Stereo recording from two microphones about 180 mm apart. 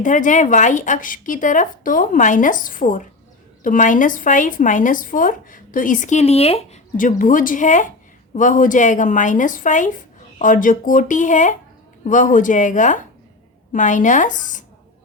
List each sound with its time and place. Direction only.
0.0 s speech: 45° left (ahead or behind)
6.9 s speech: 45° left (ahead or behind)